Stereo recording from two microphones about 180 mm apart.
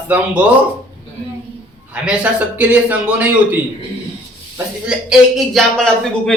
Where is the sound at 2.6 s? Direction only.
10° right (ahead or behind).